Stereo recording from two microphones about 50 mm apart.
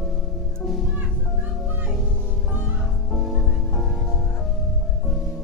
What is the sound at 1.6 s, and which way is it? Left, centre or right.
Music, right.